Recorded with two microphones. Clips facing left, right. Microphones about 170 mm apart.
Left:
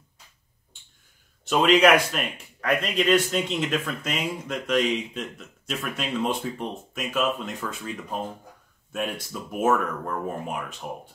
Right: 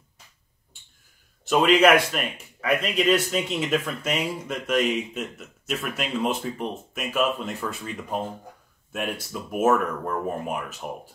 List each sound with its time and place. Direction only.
1.5 s speech: 5° right (ahead or behind)